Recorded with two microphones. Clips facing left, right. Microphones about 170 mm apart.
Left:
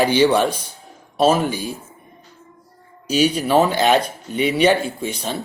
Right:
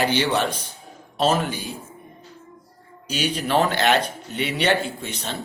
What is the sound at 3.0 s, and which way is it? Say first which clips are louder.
Speech: left 7 dB; 10° left (ahead or behind).